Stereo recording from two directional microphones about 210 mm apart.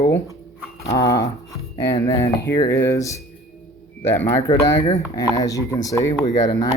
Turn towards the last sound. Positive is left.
turn(degrees=15)  # may be behind; listen again after turning